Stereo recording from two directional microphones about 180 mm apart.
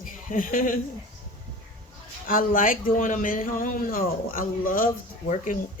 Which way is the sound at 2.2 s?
50° left (ahead or behind).